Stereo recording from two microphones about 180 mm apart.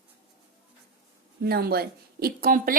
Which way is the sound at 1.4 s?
60° right (ahead or behind).